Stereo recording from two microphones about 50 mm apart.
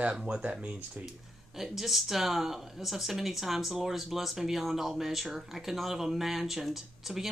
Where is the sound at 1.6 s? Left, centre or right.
Centre.